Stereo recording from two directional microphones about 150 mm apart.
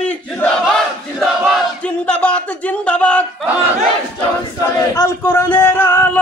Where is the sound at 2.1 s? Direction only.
10° left (ahead or behind).